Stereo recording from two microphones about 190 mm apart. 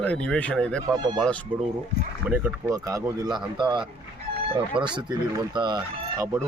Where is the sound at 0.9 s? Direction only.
25° right (ahead or behind).